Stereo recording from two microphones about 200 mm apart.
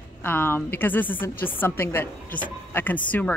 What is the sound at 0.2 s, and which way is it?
Speech, 10° left (ahead or behind).